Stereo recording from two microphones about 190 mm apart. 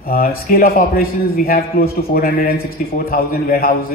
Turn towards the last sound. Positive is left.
turn(degrees=50)  # may be behind; listen again after turning